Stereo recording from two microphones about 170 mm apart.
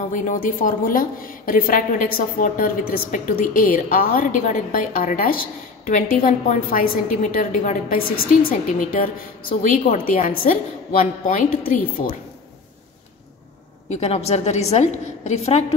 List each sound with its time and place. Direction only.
0.1 s a woman's voice: 50° left (ahead or behind)
13.8 s a woman's voice: 40° left (ahead or behind)